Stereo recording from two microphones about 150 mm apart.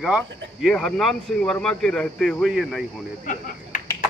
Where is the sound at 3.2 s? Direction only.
65° left (ahead or behind).